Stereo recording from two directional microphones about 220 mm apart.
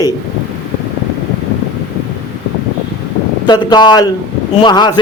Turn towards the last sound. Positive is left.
turn(degrees=20)  # may be behind; listen again after turning